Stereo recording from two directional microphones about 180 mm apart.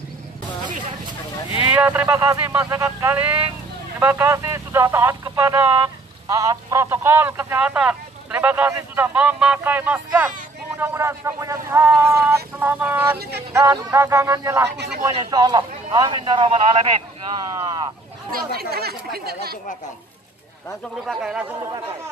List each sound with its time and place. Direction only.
1.7 s a man's voice: 10° right (ahead or behind)
18.3 s speech: 60° right (ahead or behind)
21.1 s speech: 5° right (ahead or behind)